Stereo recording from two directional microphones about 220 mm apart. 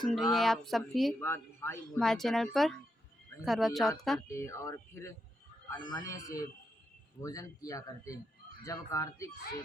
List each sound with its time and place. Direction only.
0.0 s speech: centre (ahead or behind)
4.3 s speech: 10° left (ahead or behind)